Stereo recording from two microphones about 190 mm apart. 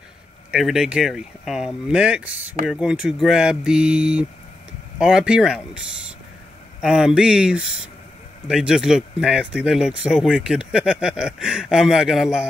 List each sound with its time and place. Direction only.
0.5 s speech: centre (ahead or behind)